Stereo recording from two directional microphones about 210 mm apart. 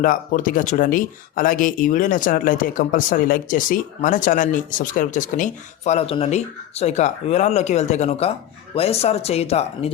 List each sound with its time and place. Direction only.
0.0 s speech: 40° left (ahead or behind)